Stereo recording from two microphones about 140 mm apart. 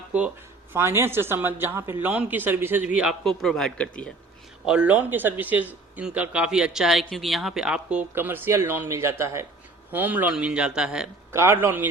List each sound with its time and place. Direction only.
0.7 s a man's voice: 20° right (ahead or behind); by 4.1 s 10° left (ahead or behind)
4.6 s a man's voice: 5° right (ahead or behind)
11.3 s a man's voice: 20° right (ahead or behind)